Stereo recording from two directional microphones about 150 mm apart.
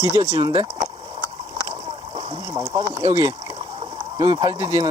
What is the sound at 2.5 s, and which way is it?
Speech, 25° right (ahead or behind).